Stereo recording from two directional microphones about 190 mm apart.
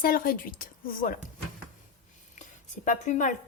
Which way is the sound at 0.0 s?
50° left (ahead or behind).